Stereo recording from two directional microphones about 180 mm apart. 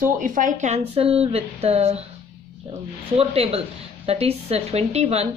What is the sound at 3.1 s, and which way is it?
A woman's voice, 35° right (ahead or behind).